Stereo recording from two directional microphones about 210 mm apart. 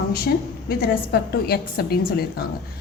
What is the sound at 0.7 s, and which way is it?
A woman's voice, 50° left (ahead or behind).